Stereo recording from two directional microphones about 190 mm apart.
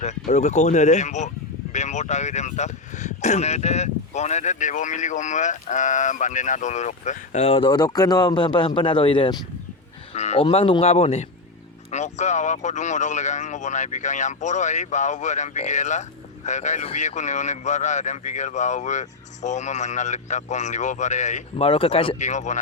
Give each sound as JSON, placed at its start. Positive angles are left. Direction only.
{"t": 0.3, "sound": "speech", "side_deg": 35}